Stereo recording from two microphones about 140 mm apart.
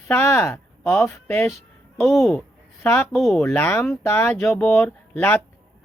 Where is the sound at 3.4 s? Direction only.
15° left (ahead or behind).